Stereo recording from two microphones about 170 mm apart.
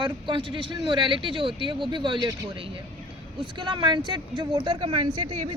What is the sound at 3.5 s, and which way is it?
Speech, 25° right (ahead or behind).